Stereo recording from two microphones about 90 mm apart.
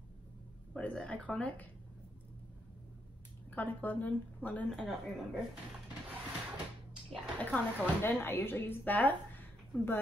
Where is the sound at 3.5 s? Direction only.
20° left (ahead or behind).